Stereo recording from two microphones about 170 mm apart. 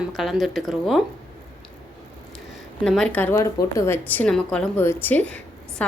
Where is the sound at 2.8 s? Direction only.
Centre (ahead or behind).